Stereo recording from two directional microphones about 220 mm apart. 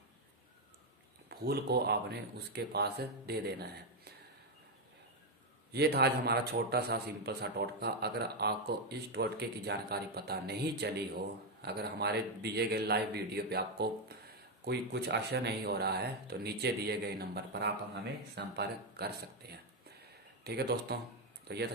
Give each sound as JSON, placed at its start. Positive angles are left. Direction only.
{"t": 1.3, "sound": "a man's voice", "side_deg": -45}
{"t": 5.7, "sound": "a man's voice", "side_deg": -50}